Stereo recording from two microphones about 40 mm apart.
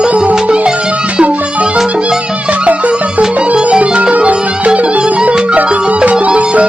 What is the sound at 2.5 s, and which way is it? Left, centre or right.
Music, right.